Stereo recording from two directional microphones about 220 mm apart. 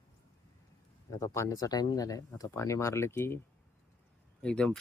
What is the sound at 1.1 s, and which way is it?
Speech, 15° left (ahead or behind).